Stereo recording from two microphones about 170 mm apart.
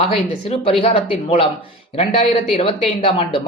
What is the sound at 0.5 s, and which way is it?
Speech, 35° left (ahead or behind).